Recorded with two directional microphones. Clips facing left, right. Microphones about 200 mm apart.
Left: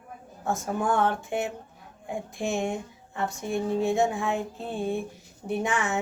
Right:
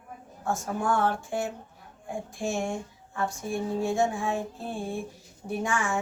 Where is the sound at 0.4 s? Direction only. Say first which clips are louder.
Left 1 dB; 20° left (ahead or behind).